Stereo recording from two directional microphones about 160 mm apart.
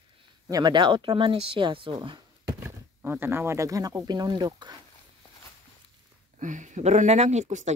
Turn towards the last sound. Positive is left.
turn(degrees=-50)  # may be behind; listen again after turning